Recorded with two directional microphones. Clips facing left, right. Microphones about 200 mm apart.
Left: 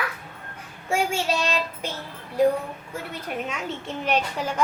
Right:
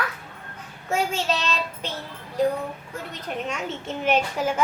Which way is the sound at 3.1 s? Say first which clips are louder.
Right 1 dB; centre (ahead or behind).